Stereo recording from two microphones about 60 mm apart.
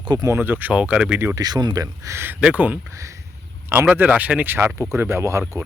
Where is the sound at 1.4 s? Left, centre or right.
Right.